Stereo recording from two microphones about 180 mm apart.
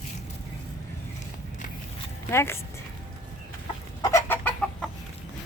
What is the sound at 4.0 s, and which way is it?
Chicken, 15° left (ahead or behind).